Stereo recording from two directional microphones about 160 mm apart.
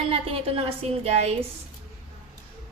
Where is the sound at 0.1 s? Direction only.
35° right (ahead or behind).